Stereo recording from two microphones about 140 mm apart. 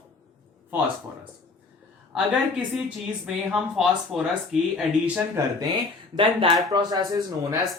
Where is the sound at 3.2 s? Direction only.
5° right (ahead or behind).